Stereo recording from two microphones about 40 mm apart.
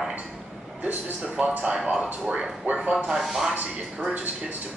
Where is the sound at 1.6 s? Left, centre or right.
Right.